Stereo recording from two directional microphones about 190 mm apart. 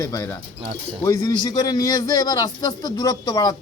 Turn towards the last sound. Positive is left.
turn(degrees=20)  # may be behind; listen again after turning